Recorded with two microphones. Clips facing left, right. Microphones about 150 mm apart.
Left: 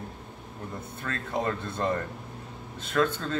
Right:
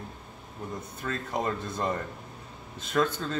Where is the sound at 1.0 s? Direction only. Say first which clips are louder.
Left 1 dB; 10° right (ahead or behind).